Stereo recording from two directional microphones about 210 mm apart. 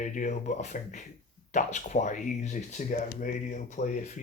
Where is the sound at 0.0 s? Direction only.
35° left (ahead or behind).